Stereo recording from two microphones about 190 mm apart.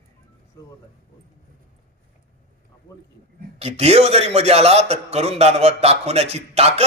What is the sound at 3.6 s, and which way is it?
A man's voice, 35° right (ahead or behind).